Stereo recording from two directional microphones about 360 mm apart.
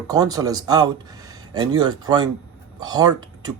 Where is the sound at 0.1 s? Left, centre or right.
Centre.